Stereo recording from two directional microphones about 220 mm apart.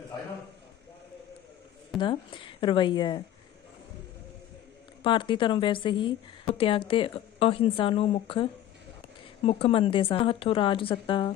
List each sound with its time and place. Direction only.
2.0 s a woman's voice: 20° left (ahead or behind)
5.0 s a woman's voice: 20° left (ahead or behind)
9.5 s a woman's voice: 25° left (ahead or behind)